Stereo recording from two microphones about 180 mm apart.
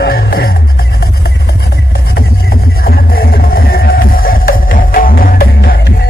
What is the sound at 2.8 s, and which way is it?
Music, 55° left (ahead or behind).